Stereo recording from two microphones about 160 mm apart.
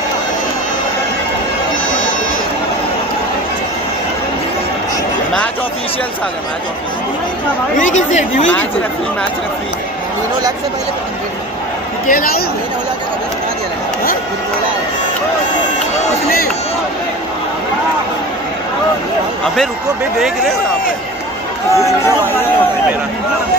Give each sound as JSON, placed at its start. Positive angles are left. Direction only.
{"t": 7.7, "sound": "speech", "side_deg": 50}
{"t": 12.1, "sound": "a man's voice", "side_deg": 65}
{"t": 20.2, "sound": "speech", "side_deg": 0}
{"t": 21.7, "sound": "speech", "side_deg": 15}